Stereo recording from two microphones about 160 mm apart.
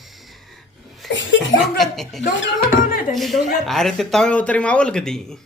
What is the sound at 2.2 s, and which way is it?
Speech, 55° left (ahead or behind).